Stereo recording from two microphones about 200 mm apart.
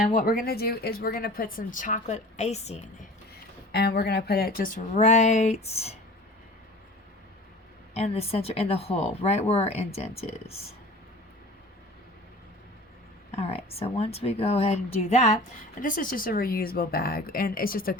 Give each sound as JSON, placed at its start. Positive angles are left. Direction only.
{"t": 0.1, "sound": "speech", "side_deg": 45}
{"t": 3.7, "sound": "speech", "side_deg": 55}
{"t": 7.9, "sound": "speech", "side_deg": 30}
{"t": 13.3, "sound": "speech", "side_deg": 30}